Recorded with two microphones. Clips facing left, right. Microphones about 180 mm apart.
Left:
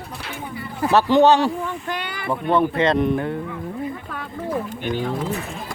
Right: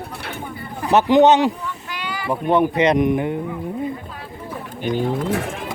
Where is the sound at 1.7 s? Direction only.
50° left (ahead or behind).